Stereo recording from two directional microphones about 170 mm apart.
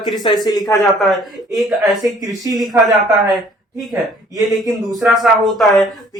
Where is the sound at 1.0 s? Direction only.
Centre (ahead or behind).